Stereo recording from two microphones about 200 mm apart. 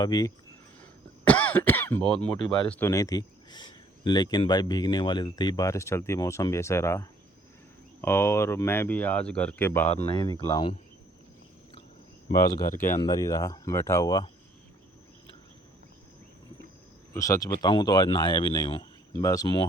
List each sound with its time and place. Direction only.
0.0 s speech: 20° left (ahead or behind)
1.2 s speech: 5° left (ahead or behind)
9.9 s speech: 30° left (ahead or behind)
13.0 s speech: 20° left (ahead or behind)
17.2 s speech: 15° left (ahead or behind)